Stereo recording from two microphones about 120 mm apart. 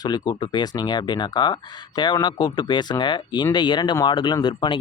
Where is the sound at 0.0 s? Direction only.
35° left (ahead or behind).